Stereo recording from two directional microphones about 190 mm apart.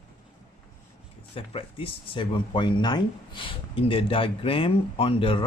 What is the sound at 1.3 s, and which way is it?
Speech, 30° left (ahead or behind).